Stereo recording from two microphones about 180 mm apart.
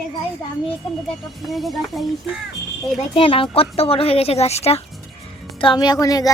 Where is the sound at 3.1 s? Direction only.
30° left (ahead or behind).